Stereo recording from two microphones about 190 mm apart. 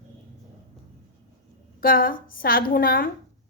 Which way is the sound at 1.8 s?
50° left (ahead or behind).